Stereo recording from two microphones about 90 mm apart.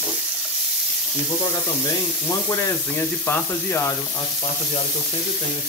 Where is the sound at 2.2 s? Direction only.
25° left (ahead or behind).